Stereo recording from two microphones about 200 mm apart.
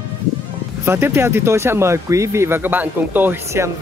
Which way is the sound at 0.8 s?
10° right (ahead or behind).